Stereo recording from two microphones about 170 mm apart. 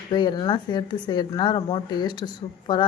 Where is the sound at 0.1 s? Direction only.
25° left (ahead or behind).